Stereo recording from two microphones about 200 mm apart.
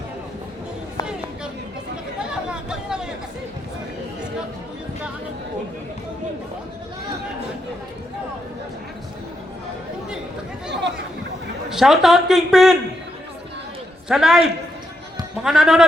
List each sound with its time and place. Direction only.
2.5 s a sound: 5° right (ahead or behind)
11.7 s speech: centre (ahead or behind)
14.1 s speech: centre (ahead or behind)